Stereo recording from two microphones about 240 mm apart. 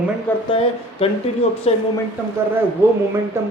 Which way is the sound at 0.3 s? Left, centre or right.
Centre.